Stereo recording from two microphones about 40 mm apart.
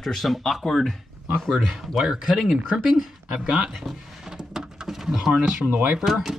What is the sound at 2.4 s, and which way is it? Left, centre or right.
Speech, centre.